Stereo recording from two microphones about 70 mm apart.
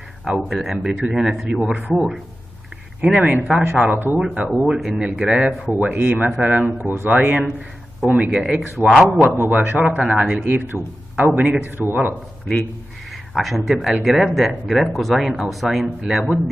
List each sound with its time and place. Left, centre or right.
0.2 s speech: centre
2.0 s speech: centre
3.0 s speech: centre
3.8 s speech: right
4.2 s speech: centre
5.9 s speech: right
8.5 s speech: centre
9.2 s speech: right
10.1 s speech: centre
10.4 s speech: right
13.3 s speech: centre